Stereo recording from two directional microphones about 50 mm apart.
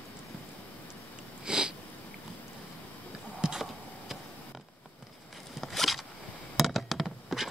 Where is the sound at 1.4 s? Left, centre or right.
Centre.